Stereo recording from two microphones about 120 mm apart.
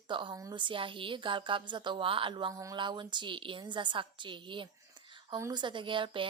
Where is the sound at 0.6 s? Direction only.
45° right (ahead or behind).